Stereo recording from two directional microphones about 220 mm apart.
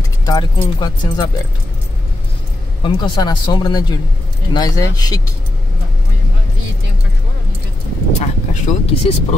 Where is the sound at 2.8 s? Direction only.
20° left (ahead or behind).